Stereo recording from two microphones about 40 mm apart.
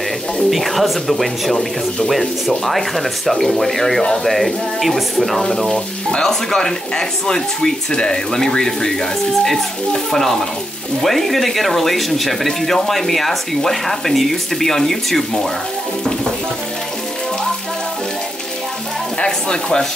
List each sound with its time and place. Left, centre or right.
0.5 s speech: centre
16.0 s speech: centre
19.1 s speech: centre